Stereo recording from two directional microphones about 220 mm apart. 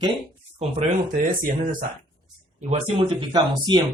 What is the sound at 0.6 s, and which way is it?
Speech, 30° right (ahead or behind).